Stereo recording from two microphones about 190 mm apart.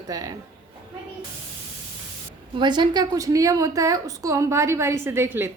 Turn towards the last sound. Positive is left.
turn(degrees=-10)  # may be behind; listen again after turning